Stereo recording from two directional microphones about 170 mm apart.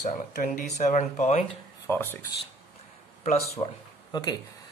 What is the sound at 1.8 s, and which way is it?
Speech, 15° left (ahead or behind).